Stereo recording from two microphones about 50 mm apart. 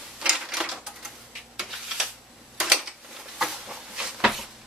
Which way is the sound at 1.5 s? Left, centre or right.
Centre.